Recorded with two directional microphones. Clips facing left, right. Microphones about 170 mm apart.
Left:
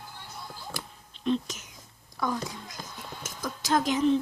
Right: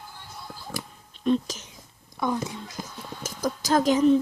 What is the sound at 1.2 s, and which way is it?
Speech, 45° right (ahead or behind).